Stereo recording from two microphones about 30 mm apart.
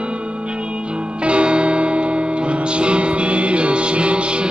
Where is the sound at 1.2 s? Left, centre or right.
Right.